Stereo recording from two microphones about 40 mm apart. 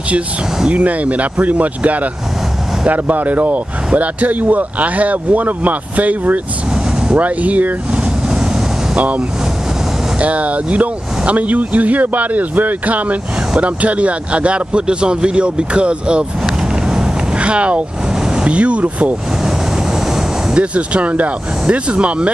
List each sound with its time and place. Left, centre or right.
0.7 s speech: right
16.4 s vehicle: centre
17.4 s speech: right
20.5 s speech: right